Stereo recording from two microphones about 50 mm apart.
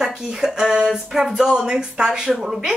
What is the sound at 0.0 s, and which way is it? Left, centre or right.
Speech, centre.